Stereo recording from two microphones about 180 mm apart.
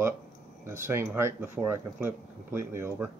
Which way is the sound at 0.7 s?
15° right (ahead or behind).